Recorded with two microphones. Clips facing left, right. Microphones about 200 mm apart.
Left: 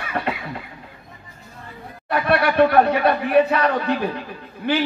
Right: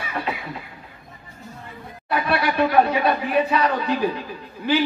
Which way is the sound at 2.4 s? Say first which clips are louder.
Left 3 dB; 60° left (ahead or behind).